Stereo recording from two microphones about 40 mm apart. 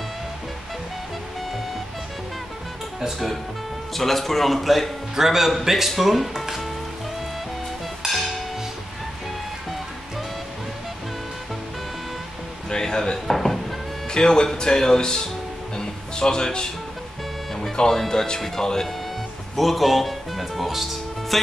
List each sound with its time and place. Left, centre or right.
3.9 s speech: centre
5.1 s speech: centre
12.6 s a sound: centre
14.1 s speech: centre
15.8 s music: centre
17.9 s speech: centre
19.5 s speech: centre